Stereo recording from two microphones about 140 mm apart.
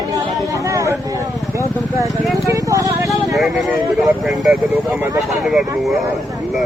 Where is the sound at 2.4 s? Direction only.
25° right (ahead or behind).